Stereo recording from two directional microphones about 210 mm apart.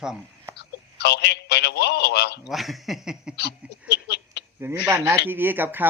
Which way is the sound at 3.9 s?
50° left (ahead or behind).